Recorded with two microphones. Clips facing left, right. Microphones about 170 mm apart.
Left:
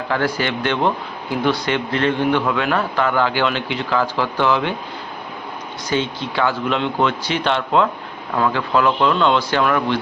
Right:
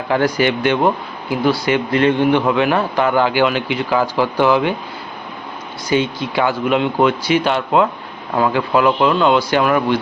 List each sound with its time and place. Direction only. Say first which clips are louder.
0.1 s a man's voice: right 5 dB; 15° right (ahead or behind)
5.9 s a man's voice: right 4 dB; 10° right (ahead or behind)